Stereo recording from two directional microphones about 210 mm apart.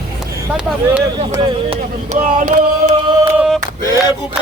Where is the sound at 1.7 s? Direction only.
35° right (ahead or behind).